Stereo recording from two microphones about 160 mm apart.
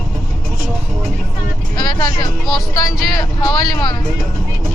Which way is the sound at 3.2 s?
25° left (ahead or behind).